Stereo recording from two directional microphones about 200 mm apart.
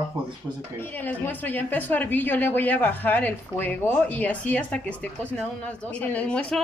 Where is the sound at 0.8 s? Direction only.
10° left (ahead or behind).